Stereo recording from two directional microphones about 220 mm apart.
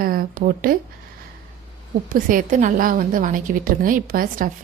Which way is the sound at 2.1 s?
35° right (ahead or behind).